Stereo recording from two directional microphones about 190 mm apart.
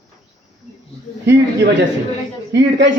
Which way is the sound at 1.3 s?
65° right (ahead or behind).